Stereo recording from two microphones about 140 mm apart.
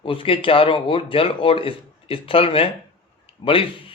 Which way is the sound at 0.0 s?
40° left (ahead or behind).